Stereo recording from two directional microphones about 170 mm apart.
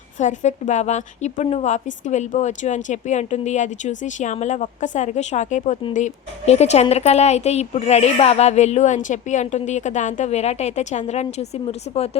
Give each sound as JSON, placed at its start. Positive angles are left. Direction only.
{"t": 0.2, "sound": "a woman's voice", "side_deg": 45}